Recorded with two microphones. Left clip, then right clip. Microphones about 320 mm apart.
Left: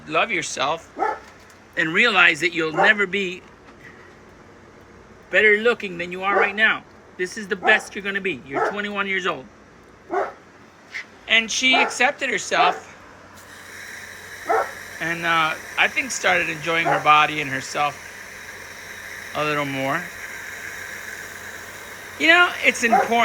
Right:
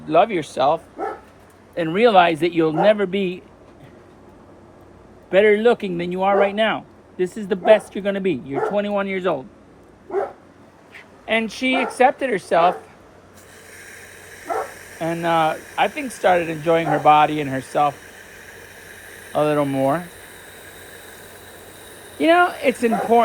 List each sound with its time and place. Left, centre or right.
0.1 s speech: centre
5.3 s speech: centre
11.3 s speech: centre
13.7 s dog: right
15.0 s speech: centre
18.2 s a sound: right
19.3 s speech: centre
22.2 s speech: centre